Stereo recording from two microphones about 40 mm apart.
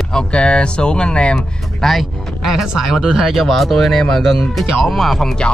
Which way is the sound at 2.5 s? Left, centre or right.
Centre.